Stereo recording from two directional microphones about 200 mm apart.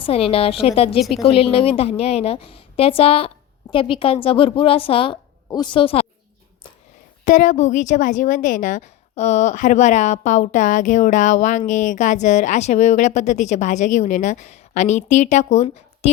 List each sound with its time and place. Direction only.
0.0 s a woman's voice: 30° left (ahead or behind)
7.3 s a woman's voice: 40° left (ahead or behind)